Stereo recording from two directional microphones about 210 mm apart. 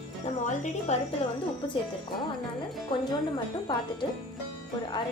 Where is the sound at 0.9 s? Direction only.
30° left (ahead or behind).